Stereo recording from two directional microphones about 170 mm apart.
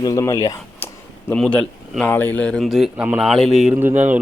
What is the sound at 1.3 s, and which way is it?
A man's voice, 5° left (ahead or behind).